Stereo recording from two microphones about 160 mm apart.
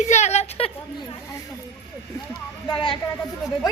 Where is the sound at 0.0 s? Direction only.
45° left (ahead or behind).